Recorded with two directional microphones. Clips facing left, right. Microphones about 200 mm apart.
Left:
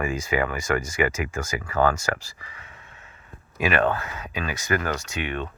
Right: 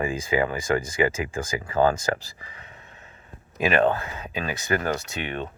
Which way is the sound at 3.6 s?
30° right (ahead or behind).